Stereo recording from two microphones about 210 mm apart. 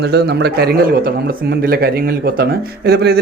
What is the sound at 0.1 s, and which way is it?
A man's voice, 50° right (ahead or behind).